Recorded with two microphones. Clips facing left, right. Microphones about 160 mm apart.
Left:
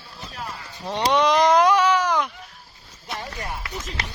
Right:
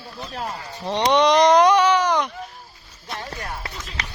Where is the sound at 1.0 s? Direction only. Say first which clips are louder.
Right 2 dB; 5° left (ahead or behind).